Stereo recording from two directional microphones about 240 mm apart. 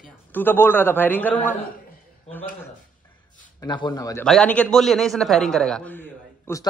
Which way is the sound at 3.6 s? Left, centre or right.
Centre.